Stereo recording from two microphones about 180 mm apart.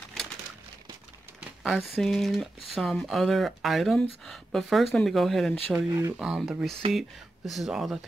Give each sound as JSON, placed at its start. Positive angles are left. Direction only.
{"t": 1.4, "sound": "speech", "side_deg": 0}
{"t": 5.9, "sound": "speech", "side_deg": -20}
{"t": 6.1, "sound": "speech", "side_deg": -5}